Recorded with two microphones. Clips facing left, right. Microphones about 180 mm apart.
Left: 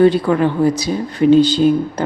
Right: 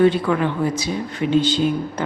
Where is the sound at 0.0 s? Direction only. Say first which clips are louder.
Left 4 dB; 35° left (ahead or behind).